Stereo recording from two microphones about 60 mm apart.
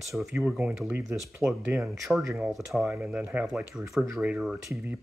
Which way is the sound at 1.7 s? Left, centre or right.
Right.